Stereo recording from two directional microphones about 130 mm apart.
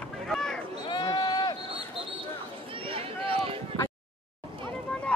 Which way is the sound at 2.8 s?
45° right (ahead or behind).